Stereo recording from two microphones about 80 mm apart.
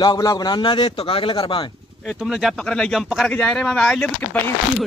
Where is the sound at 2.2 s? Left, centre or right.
Centre.